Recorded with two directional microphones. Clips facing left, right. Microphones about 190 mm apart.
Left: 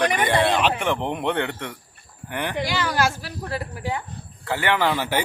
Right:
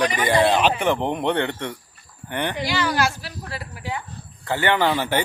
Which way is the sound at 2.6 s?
50° left (ahead or behind).